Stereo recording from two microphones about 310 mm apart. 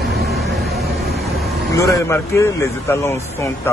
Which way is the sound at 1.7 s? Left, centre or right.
Centre.